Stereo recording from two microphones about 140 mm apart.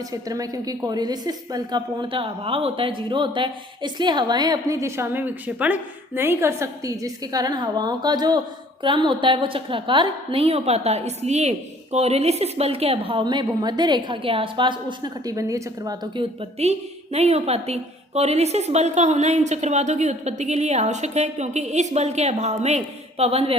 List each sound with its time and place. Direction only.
0.1 s a woman's voice: 25° right (ahead or behind)
16.6 s speech: 50° right (ahead or behind)